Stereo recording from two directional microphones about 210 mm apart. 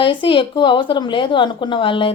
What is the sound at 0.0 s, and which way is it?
Speech, 25° left (ahead or behind).